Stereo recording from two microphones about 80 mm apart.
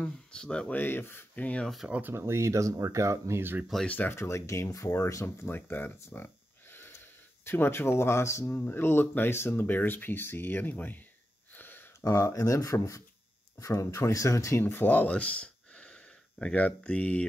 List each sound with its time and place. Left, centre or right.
0.0 s speech: centre
0.7 s speech: left
1.9 s speech: right
2.1 s speech: right
3.8 s speech: left
11.5 s a sound: left
12.0 s speech: left; by 17.3 s centre